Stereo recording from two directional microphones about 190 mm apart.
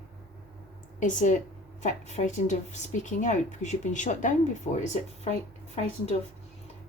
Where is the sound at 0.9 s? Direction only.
40° left (ahead or behind).